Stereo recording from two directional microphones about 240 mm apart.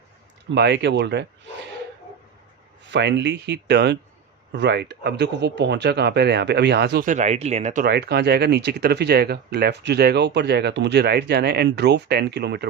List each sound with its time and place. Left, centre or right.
0.5 s speech: right
2.9 s speech: right